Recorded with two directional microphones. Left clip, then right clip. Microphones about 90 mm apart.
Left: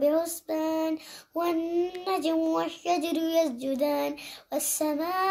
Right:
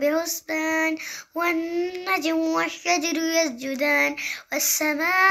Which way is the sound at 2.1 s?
15° right (ahead or behind).